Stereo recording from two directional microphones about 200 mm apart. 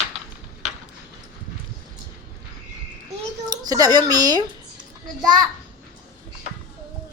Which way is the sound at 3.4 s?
20° right (ahead or behind).